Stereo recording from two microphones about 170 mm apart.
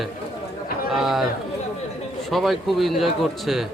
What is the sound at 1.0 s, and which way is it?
Speech, centre (ahead or behind).